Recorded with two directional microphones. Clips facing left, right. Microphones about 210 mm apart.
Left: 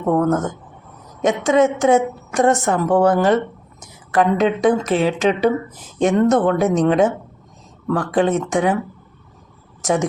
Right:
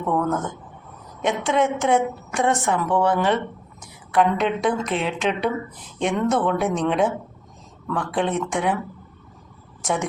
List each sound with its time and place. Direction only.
0.0 s a woman's voice: 40° left (ahead or behind)
9.8 s a woman's voice: 45° left (ahead or behind)